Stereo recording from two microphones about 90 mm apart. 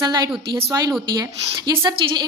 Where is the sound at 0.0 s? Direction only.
50° right (ahead or behind).